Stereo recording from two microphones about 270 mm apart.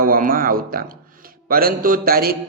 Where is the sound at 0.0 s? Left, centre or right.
Right.